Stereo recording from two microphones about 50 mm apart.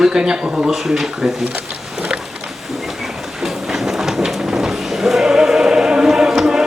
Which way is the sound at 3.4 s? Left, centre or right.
Centre.